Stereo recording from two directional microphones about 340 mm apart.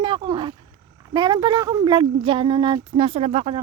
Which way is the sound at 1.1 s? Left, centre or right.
Centre.